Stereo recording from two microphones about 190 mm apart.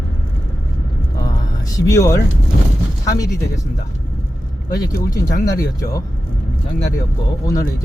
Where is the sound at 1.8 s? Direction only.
15° left (ahead or behind).